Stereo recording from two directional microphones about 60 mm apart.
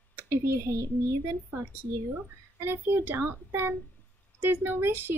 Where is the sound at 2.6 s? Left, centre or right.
Right.